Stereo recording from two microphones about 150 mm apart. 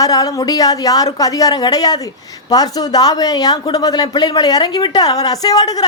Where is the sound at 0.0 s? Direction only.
25° left (ahead or behind).